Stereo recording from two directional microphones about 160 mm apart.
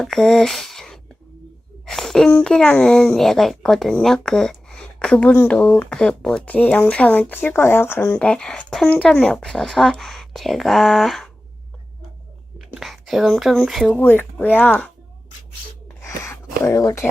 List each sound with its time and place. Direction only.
0.0 s a child's voice: centre (ahead or behind)
12.5 s speech: centre (ahead or behind)
16.0 s a sound: 15° left (ahead or behind)